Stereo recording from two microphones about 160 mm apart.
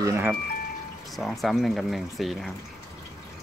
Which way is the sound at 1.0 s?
Centre (ahead or behind).